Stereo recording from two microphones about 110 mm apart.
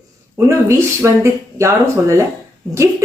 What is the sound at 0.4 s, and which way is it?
Speech, 25° right (ahead or behind).